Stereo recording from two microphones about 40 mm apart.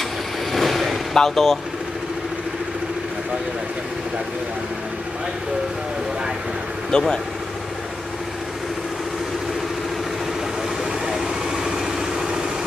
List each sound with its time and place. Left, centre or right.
0.5 s vehicle: centre
1.1 s speech: centre
6.9 s speech: centre
11.1 s vehicle: centre